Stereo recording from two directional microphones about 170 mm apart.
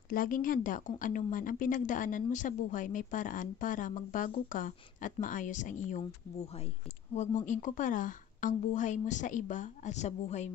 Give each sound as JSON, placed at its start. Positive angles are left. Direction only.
{"t": 0.1, "sound": "a woman's voice", "side_deg": 55}
{"t": 7.2, "sound": "a woman's voice", "side_deg": 45}